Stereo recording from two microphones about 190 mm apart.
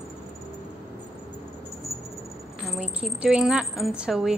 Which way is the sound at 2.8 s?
5° right (ahead or behind).